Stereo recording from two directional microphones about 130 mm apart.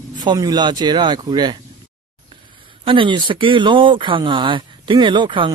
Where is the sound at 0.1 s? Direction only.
35° right (ahead or behind).